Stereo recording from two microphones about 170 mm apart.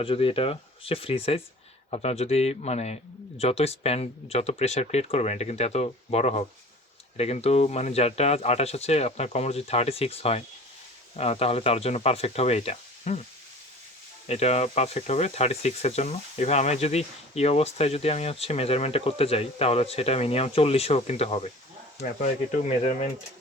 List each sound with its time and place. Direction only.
0.0 s speech: 35° left (ahead or behind)
14.3 s speech: 40° left (ahead or behind)